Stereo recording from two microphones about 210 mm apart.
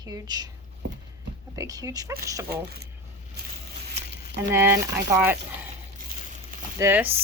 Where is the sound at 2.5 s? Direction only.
50° right (ahead or behind).